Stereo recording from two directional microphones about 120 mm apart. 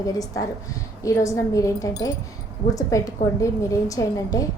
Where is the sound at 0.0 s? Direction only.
30° left (ahead or behind).